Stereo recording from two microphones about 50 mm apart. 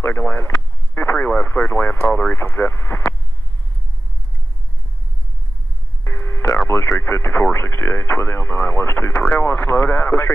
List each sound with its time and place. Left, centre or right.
0.0 s speech: left
6.0 s radio: left
6.7 s speech: left